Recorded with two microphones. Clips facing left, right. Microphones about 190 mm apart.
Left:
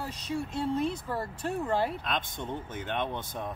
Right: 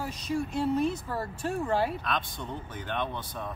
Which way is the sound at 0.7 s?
10° right (ahead or behind).